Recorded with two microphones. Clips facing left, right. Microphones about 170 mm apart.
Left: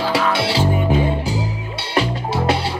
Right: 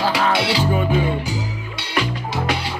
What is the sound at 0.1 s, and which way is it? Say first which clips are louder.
Music: left 1 dB; 30° left (ahead or behind).